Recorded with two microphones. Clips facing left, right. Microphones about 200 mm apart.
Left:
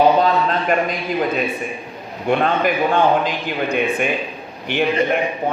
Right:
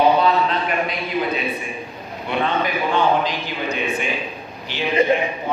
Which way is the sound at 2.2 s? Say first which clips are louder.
Left 5 dB; 50° left (ahead or behind).